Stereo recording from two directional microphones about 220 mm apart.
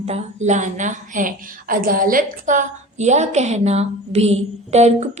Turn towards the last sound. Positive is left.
turn(degrees=-30)  # may be behind; listen again after turning